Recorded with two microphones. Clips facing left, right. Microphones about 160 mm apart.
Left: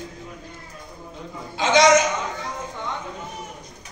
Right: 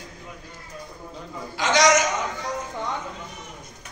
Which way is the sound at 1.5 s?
25° left (ahead or behind).